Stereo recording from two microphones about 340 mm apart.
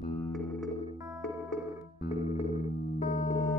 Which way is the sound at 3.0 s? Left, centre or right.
Left.